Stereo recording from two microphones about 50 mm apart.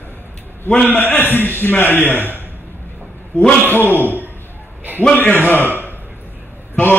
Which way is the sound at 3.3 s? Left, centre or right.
Left.